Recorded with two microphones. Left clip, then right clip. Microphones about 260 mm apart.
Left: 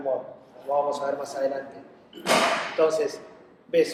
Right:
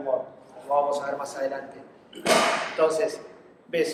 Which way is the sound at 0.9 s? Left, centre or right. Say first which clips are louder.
Even; right.